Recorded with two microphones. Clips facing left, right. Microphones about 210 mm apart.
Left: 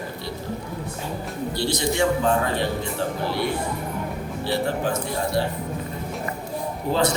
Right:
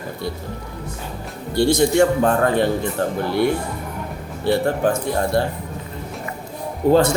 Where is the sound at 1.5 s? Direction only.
50° right (ahead or behind).